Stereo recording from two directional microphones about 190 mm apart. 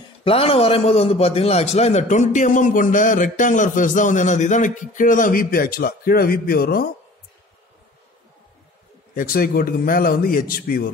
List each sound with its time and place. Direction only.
0.2 s a man's voice: 30° left (ahead or behind); by 6.9 s 50° left (ahead or behind)
9.1 s a man's voice: 50° left (ahead or behind)